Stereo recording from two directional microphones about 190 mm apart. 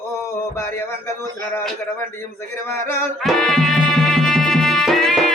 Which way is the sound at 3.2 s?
Centre (ahead or behind).